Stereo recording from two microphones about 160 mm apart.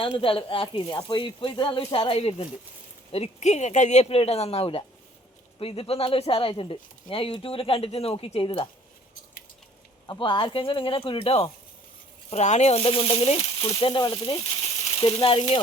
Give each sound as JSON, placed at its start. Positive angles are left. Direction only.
{"t": 0.0, "sound": "speech", "side_deg": 35}
{"t": 10.1, "sound": "speech", "side_deg": 30}